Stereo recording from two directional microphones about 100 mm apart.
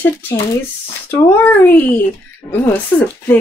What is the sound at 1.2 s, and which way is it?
Speech, 20° left (ahead or behind).